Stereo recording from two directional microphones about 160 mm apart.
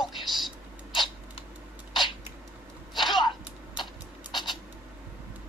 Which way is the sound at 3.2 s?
30° left (ahead or behind).